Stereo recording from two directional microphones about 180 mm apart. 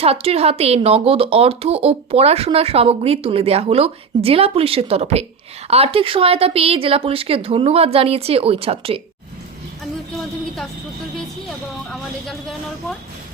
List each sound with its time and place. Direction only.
0.0 s speech: 35° right (ahead or behind)
10.2 s a sound: centre (ahead or behind)
11.9 s speech: centre (ahead or behind)